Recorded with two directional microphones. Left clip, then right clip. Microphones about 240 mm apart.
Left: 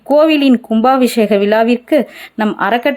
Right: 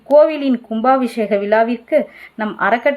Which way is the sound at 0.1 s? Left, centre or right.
Left.